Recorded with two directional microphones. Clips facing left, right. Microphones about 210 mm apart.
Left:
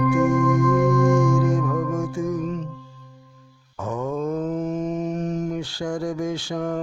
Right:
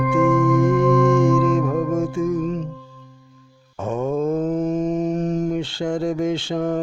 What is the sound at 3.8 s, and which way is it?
Mantra, 25° right (ahead or behind).